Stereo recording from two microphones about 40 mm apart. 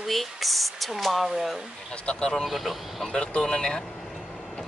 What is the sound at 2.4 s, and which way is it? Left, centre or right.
Speech, centre.